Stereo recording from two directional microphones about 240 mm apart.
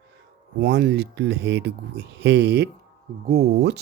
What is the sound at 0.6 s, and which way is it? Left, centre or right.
Speech, right.